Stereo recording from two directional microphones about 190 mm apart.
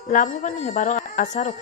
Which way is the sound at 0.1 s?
45° left (ahead or behind).